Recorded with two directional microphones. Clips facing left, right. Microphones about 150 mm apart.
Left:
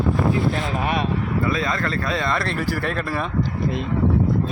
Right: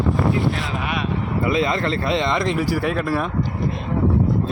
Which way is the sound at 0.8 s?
40° left (ahead or behind).